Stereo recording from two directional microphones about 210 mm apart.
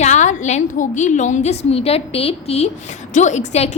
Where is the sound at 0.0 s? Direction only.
35° left (ahead or behind).